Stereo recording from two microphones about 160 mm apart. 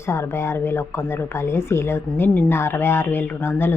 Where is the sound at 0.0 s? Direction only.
15° left (ahead or behind).